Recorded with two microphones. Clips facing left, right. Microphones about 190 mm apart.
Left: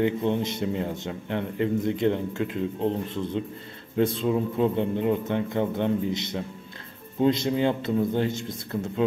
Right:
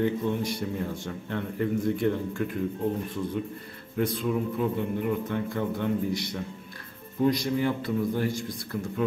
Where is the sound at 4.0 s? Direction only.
25° left (ahead or behind).